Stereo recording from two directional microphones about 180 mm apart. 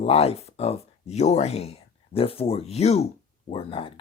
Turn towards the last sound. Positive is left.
turn(degrees=30)  # may be behind; listen again after turning